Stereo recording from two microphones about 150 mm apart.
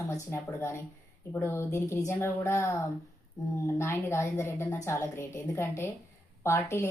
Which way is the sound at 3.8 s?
15° left (ahead or behind).